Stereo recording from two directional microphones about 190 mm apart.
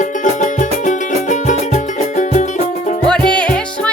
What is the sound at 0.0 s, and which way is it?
Music, 40° left (ahead or behind).